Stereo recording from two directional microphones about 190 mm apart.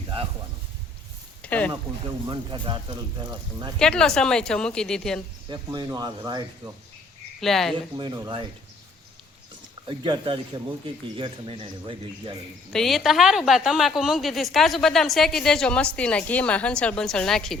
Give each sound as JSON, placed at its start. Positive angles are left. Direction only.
{"t": 1.4, "sound": "a sound", "side_deg": 5}
{"t": 2.2, "sound": "speech", "side_deg": -25}
{"t": 3.8, "sound": "a woman's voice", "side_deg": 5}
{"t": 5.5, "sound": "speech", "side_deg": -20}
{"t": 7.4, "sound": "a woman's voice", "side_deg": 0}
{"t": 7.9, "sound": "speech", "side_deg": -20}
{"t": 9.9, "sound": "speech", "side_deg": -25}
{"t": 12.7, "sound": "a woman's voice", "side_deg": 0}